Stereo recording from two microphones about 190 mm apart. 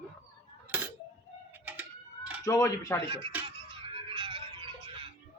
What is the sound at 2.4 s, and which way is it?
Speech, 15° left (ahead or behind).